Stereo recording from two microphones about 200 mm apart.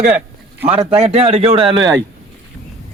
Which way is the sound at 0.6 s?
30° right (ahead or behind).